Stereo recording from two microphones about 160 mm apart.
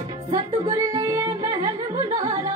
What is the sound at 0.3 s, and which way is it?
Music, 25° right (ahead or behind).